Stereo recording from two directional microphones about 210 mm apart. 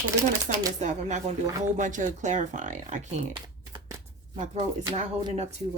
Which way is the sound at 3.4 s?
20° right (ahead or behind).